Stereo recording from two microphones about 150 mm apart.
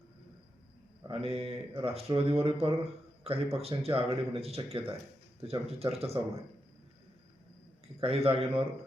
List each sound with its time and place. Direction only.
1.0 s speech: 40° right (ahead or behind)
8.0 s speech: 40° right (ahead or behind)